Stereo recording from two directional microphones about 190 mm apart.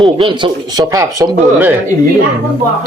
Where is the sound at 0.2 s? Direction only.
25° right (ahead or behind).